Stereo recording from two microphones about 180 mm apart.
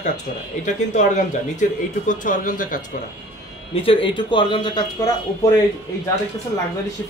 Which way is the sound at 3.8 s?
25° left (ahead or behind).